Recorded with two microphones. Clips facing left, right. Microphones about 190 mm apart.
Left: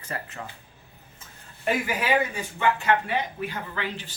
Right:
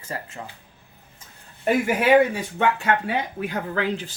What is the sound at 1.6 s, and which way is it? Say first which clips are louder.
Speech: right 6 dB; 55° right (ahead or behind).